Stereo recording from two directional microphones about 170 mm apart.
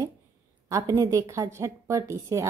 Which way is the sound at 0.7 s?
20° right (ahead or behind).